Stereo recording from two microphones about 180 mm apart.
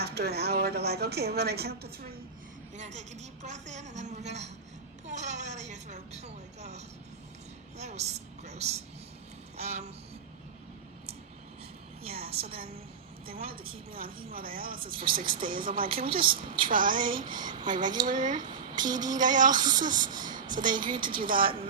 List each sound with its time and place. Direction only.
0.0 s a woman's voice: 65° right (ahead or behind)
2.7 s a woman's voice: 40° right (ahead or behind)
9.6 s a sound: 40° right (ahead or behind)
12.3 s a woman's voice: 30° right (ahead or behind)
13.2 s a woman's voice: 55° right (ahead or behind)
14.8 s speech: 30° right (ahead or behind)
15.0 s a woman's voice: 55° right (ahead or behind)
17.4 s speech: 25° right (ahead or behind)
17.7 s a woman's voice: 45° right (ahead or behind)
18.3 s a sound: 25° right (ahead or behind)
18.8 s a woman's voice: 45° right (ahead or behind)
19.5 s speech: 25° right (ahead or behind)
20.1 s a woman's voice: 50° right (ahead or behind)